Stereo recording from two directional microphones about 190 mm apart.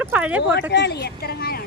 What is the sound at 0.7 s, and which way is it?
Speech, 60° left (ahead or behind).